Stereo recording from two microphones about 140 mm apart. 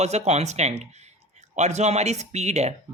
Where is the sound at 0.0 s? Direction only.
50° right (ahead or behind).